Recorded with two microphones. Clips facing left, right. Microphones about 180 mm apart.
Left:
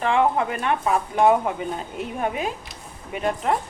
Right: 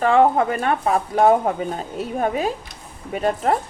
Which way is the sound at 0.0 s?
40° right (ahead or behind).